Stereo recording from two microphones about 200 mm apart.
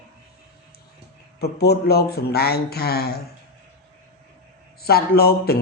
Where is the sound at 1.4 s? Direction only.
55° left (ahead or behind).